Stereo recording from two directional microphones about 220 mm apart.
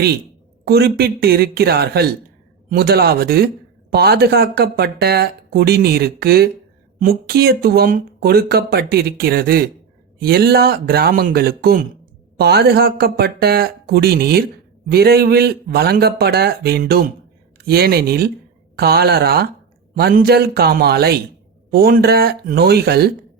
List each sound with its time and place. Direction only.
0.6 s speech: 45° right (ahead or behind)